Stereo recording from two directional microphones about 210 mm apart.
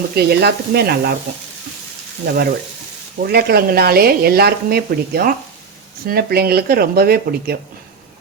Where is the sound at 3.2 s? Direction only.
45° right (ahead or behind).